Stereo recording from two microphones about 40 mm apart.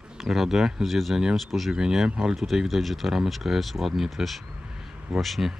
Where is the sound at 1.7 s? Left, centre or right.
Centre.